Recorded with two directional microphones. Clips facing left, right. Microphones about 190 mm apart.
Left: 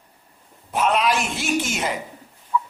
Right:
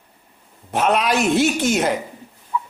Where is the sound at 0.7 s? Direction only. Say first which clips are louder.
Right 2 dB; 65° right (ahead or behind).